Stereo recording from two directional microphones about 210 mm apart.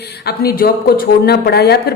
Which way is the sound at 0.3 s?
45° left (ahead or behind).